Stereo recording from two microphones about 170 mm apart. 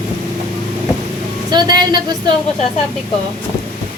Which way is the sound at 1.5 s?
25° right (ahead or behind).